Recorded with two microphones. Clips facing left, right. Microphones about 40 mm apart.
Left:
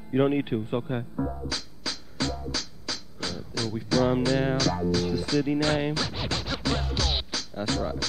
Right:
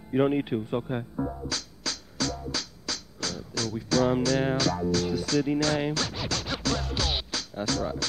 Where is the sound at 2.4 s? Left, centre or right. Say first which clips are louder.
Even; centre.